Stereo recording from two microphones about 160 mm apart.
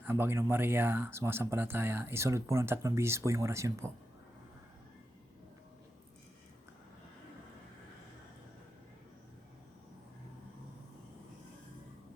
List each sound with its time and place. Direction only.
0.0 s speech: 15° right (ahead or behind)